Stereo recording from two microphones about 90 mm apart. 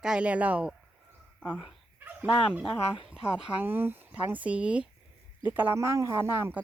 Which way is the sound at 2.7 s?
75° left (ahead or behind).